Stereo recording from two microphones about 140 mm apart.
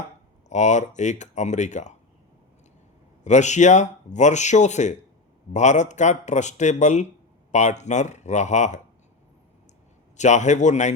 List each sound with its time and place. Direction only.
0.5 s speech: 60° left (ahead or behind)
3.2 s speech: 55° left (ahead or behind)
10.2 s speech: 55° left (ahead or behind)